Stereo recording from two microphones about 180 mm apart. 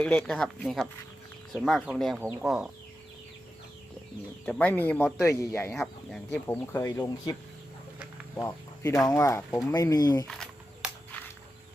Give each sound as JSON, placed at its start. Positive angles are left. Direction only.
{"t": 0.0, "sound": "speech", "side_deg": 5}
{"t": 4.4, "sound": "speech", "side_deg": 5}
{"t": 8.4, "sound": "speech", "side_deg": 15}
{"t": 10.2, "sound": "a sound", "side_deg": 0}